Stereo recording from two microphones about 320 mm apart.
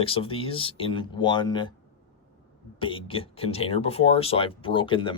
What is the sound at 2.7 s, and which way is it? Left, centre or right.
Speech, centre.